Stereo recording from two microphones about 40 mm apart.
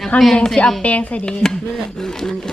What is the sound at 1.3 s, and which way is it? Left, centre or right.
Chopping, centre.